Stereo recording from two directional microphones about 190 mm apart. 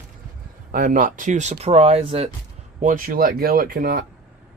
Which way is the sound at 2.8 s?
45° right (ahead or behind).